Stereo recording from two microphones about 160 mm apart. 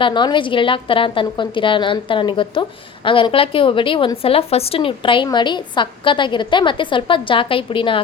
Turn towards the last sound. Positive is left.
turn(degrees=35)  # may be behind; listen again after turning